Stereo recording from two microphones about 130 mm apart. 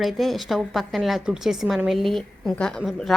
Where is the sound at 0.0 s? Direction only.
Centre (ahead or behind).